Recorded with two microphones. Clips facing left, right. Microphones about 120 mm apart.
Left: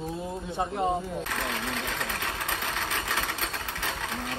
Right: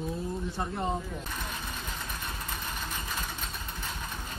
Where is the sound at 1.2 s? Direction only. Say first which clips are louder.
Left 6 dB; 80° left.